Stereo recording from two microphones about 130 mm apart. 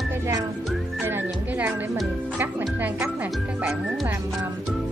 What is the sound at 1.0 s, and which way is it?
Music, 15° right (ahead or behind).